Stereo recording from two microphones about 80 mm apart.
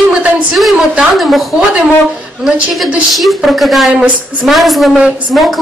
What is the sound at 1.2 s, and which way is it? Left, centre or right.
A woman's voice, centre.